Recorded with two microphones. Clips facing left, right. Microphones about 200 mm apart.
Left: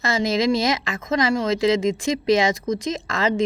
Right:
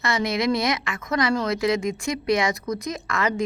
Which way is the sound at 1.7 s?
90° left.